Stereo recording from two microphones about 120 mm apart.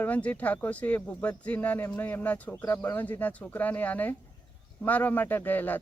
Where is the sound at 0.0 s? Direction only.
10° left (ahead or behind).